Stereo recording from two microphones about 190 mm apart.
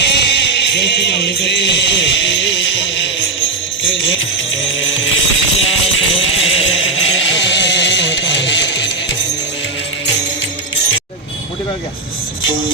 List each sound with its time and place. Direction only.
0.0 s music: 65° left (ahead or behind)
4.8 s music: 90° left; by 8.9 s 70° left (ahead or behind)